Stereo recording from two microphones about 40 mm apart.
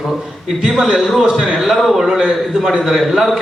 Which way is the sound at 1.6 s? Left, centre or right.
Centre.